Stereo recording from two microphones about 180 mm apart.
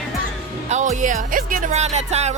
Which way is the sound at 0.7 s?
40° right (ahead or behind).